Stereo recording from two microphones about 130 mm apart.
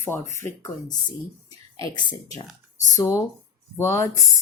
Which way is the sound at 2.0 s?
35° left (ahead or behind).